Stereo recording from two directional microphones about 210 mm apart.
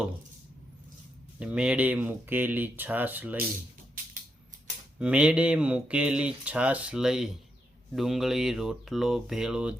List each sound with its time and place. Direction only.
1.4 s speech: 5° right (ahead or behind)
4.0 s a sound: 40° right (ahead or behind)
4.9 s speech: 5° right (ahead or behind)